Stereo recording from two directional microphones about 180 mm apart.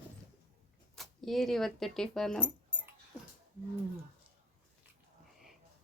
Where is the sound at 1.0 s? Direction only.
Centre (ahead or behind).